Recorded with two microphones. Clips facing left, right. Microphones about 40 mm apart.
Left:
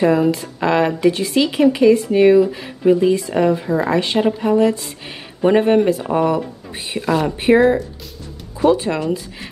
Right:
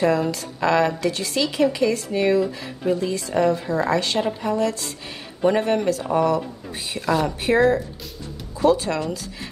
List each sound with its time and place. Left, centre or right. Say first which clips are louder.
0.0 s speech: left 5 dB; centre
7.1 s speech: left 3 dB; centre
7.3 s speech: left 7 dB; left